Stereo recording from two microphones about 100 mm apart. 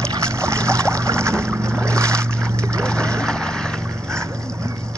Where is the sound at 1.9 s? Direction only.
30° right (ahead or behind).